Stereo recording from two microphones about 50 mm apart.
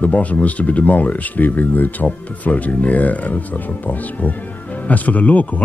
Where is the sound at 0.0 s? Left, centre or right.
Left.